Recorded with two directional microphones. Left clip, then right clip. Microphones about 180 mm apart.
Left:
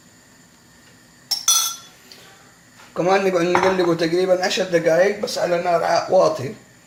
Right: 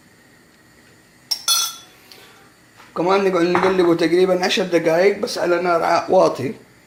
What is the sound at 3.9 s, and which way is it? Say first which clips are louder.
A man's voice: right 2 dB; 30° right (ahead or behind).